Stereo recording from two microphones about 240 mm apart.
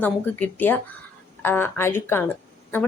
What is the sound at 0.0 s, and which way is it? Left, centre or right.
A woman's voice, centre.